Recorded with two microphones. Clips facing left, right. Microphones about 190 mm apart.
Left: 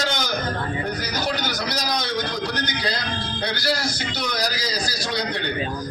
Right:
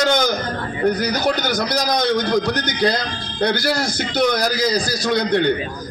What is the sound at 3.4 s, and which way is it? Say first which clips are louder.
A man's voice: right 7 dB; 50° right (ahead or behind).